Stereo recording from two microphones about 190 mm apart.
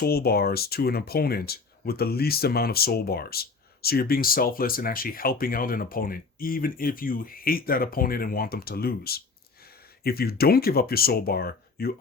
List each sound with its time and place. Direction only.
0.0 s speech: 55° left (ahead or behind)